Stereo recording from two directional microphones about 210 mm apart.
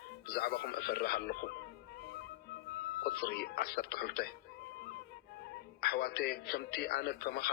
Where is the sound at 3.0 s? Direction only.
50° left (ahead or behind).